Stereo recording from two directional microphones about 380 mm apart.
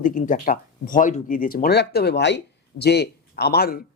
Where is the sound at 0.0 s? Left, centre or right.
Left.